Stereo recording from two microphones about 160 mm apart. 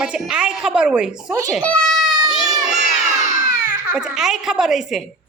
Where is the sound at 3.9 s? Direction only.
5° right (ahead or behind).